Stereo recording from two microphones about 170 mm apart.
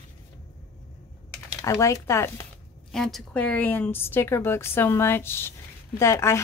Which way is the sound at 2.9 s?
Centre (ahead or behind).